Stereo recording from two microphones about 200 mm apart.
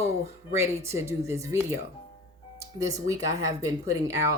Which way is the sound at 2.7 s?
15° right (ahead or behind).